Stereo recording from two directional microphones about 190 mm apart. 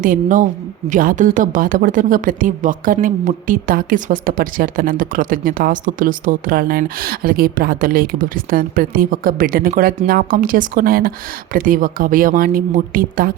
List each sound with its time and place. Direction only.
0.0 s speech: 45° right (ahead or behind)